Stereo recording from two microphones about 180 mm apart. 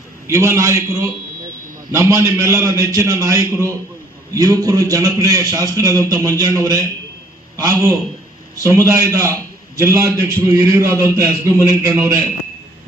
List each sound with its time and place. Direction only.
0.3 s a man's voice: 15° right (ahead or behind)